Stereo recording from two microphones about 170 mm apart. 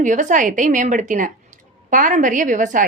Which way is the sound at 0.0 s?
50° right (ahead or behind).